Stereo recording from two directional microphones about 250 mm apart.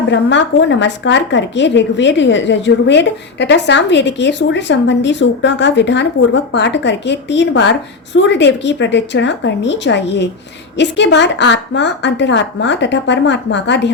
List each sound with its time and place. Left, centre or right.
0.1 s a woman's voice: left